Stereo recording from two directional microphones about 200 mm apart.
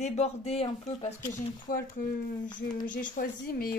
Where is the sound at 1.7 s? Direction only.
45° left (ahead or behind).